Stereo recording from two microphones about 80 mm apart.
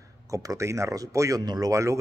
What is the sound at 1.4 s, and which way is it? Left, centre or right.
Speech, right.